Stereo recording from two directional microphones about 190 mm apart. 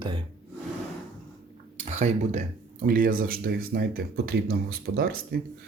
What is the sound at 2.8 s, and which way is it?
Speech, 50° right (ahead or behind).